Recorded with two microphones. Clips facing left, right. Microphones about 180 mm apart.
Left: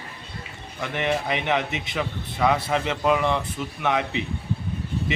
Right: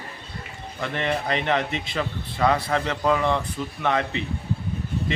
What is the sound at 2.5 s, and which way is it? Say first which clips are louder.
A man's voice: even; 20° left (ahead or behind).